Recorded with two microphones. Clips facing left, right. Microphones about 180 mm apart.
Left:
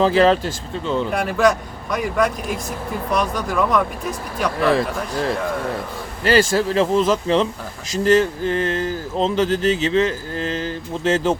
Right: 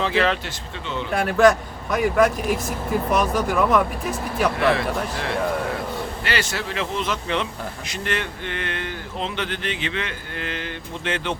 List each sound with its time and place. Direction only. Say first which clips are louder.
0.0 s speech: left 7 dB; 35° left (ahead or behind)
1.1 s a man's voice: right 3 dB; centre (ahead or behind)
4.7 s speech: left 3 dB; 40° left (ahead or behind)